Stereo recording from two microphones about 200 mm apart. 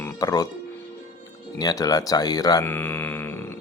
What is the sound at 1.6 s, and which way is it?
Speech, 20° left (ahead or behind).